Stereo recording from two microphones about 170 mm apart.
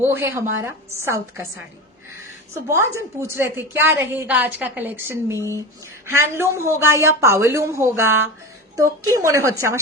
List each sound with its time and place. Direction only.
0.0 s a woman's voice: 15° right (ahead or behind)
2.6 s a woman's voice: 15° right (ahead or behind)